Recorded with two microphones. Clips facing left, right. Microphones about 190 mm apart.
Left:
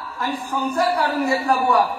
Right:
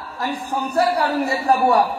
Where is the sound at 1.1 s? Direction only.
35° right (ahead or behind).